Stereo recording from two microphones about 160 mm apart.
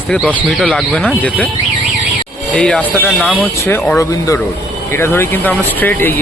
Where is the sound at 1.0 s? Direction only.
10° left (ahead or behind).